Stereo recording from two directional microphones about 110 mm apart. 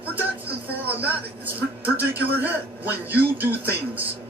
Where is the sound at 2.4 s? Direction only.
15° right (ahead or behind).